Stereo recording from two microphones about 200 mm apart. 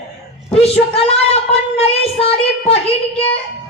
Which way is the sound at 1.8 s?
30° left (ahead or behind).